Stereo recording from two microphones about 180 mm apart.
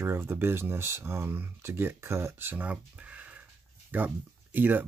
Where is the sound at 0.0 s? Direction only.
15° right (ahead or behind).